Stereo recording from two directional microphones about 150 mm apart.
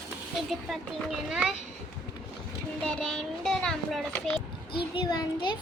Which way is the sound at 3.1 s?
5° left (ahead or behind).